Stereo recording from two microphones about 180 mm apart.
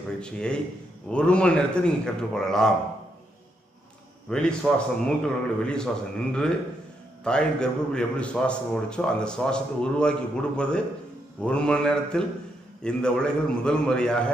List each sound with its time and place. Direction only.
0.2 s a man's voice: 5° left (ahead or behind)
4.3 s a man's voice: 5° left (ahead or behind)